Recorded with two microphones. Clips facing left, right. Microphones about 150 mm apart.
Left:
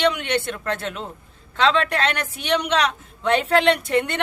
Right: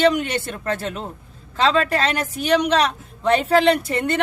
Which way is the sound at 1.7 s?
40° right (ahead or behind).